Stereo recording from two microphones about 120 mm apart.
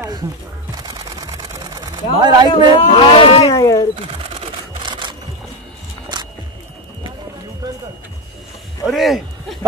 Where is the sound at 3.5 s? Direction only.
30° left (ahead or behind).